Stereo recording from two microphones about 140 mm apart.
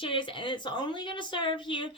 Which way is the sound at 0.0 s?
35° left (ahead or behind).